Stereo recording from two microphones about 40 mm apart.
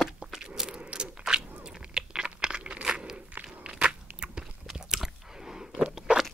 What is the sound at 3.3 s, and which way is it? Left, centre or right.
Biting, right.